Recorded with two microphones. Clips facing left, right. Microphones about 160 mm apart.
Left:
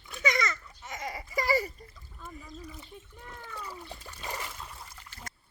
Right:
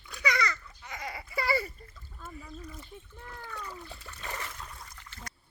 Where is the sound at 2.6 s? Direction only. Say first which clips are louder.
Even; 10° left (ahead or behind).